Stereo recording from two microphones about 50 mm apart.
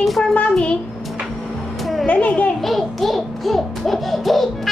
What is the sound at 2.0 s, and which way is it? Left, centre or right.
Speech, left.